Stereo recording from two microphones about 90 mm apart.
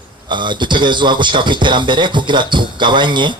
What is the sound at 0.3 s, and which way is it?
A man's voice, 60° right (ahead or behind).